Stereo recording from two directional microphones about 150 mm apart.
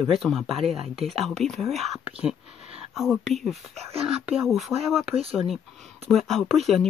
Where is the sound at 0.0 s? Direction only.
Centre (ahead or behind).